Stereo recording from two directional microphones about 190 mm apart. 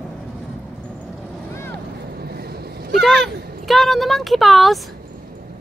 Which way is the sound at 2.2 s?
55° right (ahead or behind).